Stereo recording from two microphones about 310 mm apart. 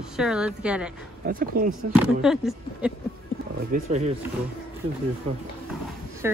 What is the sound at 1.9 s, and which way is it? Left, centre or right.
Speech, centre.